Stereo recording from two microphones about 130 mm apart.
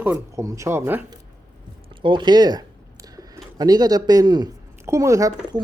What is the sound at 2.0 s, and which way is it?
Speech, 40° right (ahead or behind).